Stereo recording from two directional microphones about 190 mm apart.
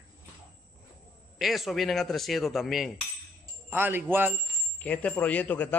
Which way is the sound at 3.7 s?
10° right (ahead or behind).